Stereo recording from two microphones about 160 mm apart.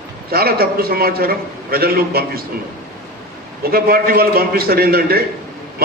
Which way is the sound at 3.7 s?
70° right (ahead or behind).